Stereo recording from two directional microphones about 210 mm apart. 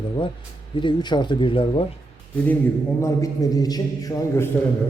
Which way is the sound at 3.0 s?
15° left (ahead or behind).